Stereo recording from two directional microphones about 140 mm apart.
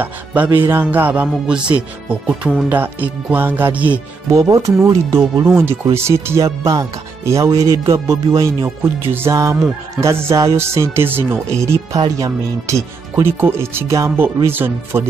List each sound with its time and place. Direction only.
0.0 s speech: 10° right (ahead or behind)
4.3 s speech: 25° right (ahead or behind)